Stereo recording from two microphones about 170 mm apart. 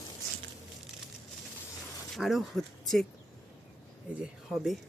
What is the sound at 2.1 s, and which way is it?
Speech, centre (ahead or behind).